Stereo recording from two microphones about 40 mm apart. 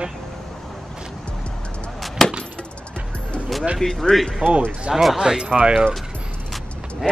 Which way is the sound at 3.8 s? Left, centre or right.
Centre.